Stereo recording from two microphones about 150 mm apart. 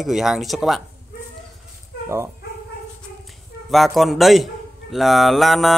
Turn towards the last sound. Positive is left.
turn(degrees=0)  # may be behind; listen again after turning